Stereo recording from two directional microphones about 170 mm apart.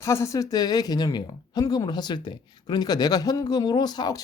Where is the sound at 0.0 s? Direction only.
15° left (ahead or behind).